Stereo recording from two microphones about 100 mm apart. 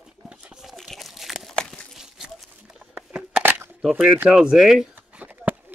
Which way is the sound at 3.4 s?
20° right (ahead or behind).